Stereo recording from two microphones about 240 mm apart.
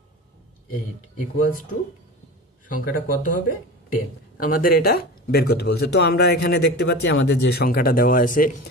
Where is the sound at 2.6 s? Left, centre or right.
Left.